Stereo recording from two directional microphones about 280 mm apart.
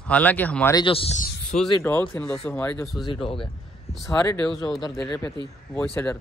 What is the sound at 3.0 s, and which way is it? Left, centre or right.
Speech, centre.